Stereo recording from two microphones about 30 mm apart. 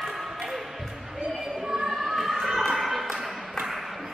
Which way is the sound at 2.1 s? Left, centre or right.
Centre.